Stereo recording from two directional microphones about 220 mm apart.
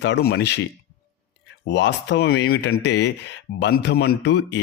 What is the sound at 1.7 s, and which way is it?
A man's voice, 55° left (ahead or behind).